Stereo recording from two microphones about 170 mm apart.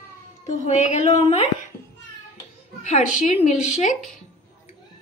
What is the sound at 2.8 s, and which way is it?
A woman's voice, 45° left (ahead or behind).